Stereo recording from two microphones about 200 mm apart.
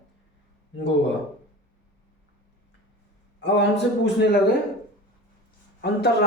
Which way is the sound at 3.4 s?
60° left (ahead or behind).